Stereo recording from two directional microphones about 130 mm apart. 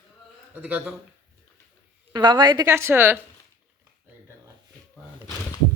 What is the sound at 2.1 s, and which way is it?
Speech, 35° right (ahead or behind).